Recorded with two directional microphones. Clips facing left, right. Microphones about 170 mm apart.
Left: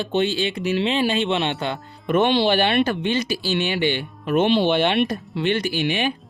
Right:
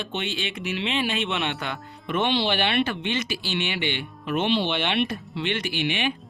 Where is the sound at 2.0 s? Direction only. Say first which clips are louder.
Left 6 dB; 45° left (ahead or behind).